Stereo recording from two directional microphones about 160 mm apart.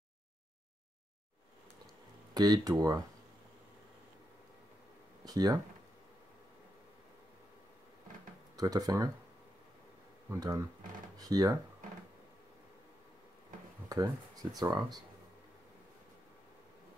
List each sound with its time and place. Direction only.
2.3 s speech: 25° right (ahead or behind)
5.2 s speech: 25° right (ahead or behind)
8.5 s speech: 25° right (ahead or behind)
10.3 s speech: 20° right (ahead or behind)
13.8 s speech: 25° right (ahead or behind)